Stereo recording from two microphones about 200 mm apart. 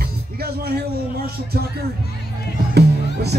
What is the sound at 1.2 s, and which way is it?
Speech, 50° right (ahead or behind).